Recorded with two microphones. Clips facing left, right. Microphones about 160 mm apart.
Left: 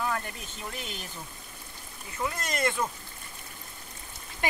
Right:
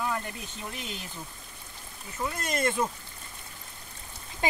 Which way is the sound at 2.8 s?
25° right (ahead or behind).